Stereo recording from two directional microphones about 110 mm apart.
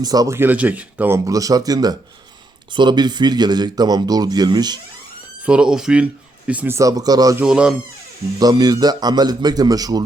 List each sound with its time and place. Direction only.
0.0 s a man's voice: 35° right (ahead or behind)
0.3 s speech: 15° right (ahead or behind)
1.1 s a man's voice: 30° right (ahead or behind)
5.5 s speech: 5° right (ahead or behind)
6.7 s a man's voice: 35° right (ahead or behind)
7.4 s speech: 5° right (ahead or behind)
8.4 s a man's voice: 35° right (ahead or behind)